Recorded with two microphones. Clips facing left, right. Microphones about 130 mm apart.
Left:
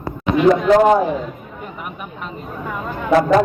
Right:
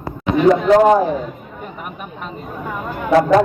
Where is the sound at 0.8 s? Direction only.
35° right (ahead or behind).